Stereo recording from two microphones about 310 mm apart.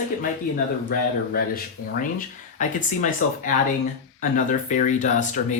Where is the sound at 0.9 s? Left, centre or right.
Left.